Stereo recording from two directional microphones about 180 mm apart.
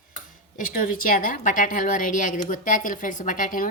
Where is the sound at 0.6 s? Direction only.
50° left (ahead or behind).